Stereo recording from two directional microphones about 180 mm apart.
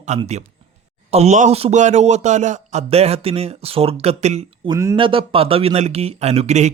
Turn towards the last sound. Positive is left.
turn(degrees=-40)  # may be behind; listen again after turning